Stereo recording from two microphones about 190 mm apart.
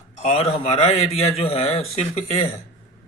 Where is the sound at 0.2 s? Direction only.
35° left (ahead or behind).